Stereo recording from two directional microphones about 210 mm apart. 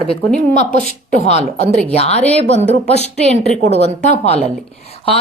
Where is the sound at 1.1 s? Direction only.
30° left (ahead or behind).